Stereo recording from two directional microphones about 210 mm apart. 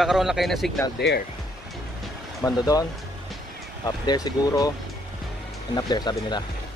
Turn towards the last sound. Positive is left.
turn(degrees=20)  # may be behind; listen again after turning